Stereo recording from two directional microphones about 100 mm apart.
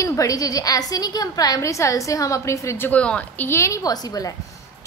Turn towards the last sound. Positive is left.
turn(degrees=40)  # may be behind; listen again after turning